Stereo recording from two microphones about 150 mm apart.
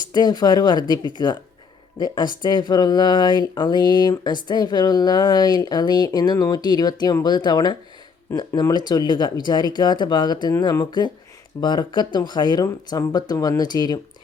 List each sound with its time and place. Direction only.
0.1 s speech: 25° left (ahead or behind)